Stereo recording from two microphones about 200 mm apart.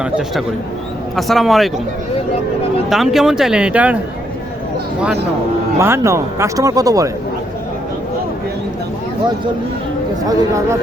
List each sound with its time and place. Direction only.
0.0 s speech: centre (ahead or behind)
2.9 s speech: centre (ahead or behind)
5.8 s speech: 15° right (ahead or behind)
10.2 s speech: 15° right (ahead or behind)